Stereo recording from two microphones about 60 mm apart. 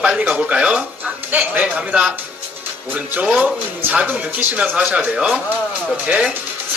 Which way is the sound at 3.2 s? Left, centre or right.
Centre.